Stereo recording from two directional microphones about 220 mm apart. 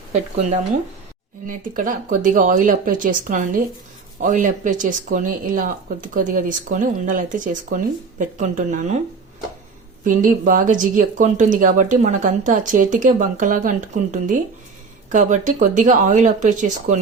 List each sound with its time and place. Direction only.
0.1 s speech: 30° right (ahead or behind)
10.0 s speech: 35° right (ahead or behind)